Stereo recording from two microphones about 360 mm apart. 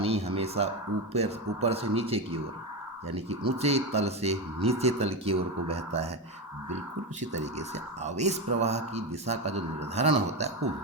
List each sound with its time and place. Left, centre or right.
0.0 s a sound: centre
1.1 s speech: centre
8.0 s speech: centre